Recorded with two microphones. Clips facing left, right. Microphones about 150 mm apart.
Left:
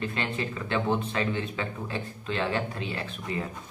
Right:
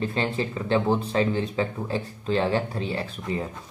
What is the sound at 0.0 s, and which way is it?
Speech, 35° right (ahead or behind).